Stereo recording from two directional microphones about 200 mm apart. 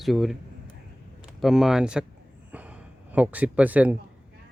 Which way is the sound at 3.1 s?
5° right (ahead or behind).